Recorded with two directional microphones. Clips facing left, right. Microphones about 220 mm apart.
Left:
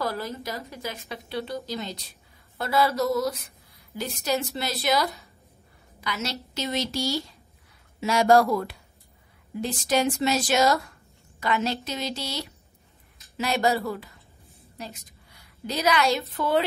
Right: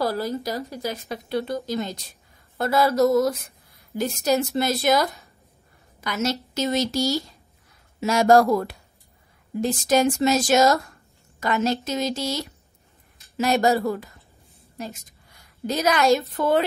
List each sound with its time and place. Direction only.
0.0 s a woman's voice: 35° right (ahead or behind)